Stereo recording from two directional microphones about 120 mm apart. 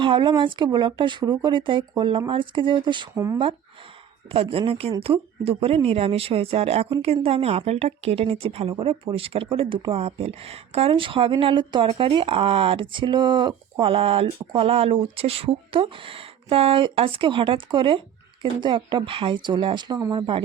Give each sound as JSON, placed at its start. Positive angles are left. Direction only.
{"t": 0.0, "sound": "speech", "side_deg": -40}
{"t": 4.3, "sound": "a woman's voice", "side_deg": -50}
{"t": 13.7, "sound": "speech", "side_deg": -50}
{"t": 20.0, "sound": "speech", "side_deg": -30}